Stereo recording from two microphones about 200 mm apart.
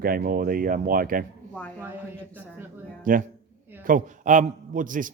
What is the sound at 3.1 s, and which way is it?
A man's voice, 45° right (ahead or behind).